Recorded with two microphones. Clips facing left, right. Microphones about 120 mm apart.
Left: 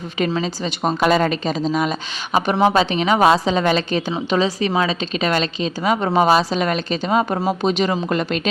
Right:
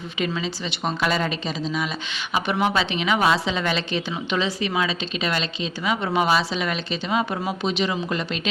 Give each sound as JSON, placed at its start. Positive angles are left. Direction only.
{"t": 0.2, "sound": "a woman's voice", "side_deg": 40}